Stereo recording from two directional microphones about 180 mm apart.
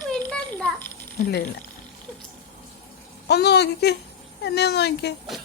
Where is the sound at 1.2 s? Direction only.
60° left (ahead or behind).